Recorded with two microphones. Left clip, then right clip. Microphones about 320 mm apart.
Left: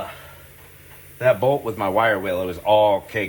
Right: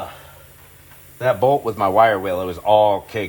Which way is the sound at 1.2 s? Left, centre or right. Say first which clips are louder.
Right 1 dB; centre.